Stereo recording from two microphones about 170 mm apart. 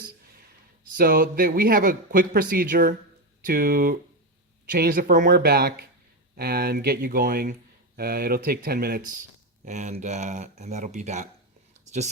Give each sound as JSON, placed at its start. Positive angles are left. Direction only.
{"t": 0.9, "sound": "a man's voice", "side_deg": -55}
{"t": 9.6, "sound": "speech", "side_deg": -45}